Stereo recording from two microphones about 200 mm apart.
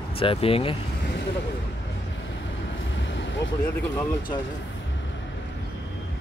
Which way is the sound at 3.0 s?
65° left (ahead or behind).